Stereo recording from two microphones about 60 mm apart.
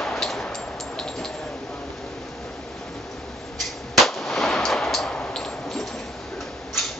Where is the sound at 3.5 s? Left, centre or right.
Centre.